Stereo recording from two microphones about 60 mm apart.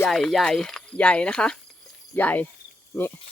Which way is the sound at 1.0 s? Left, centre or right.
Centre.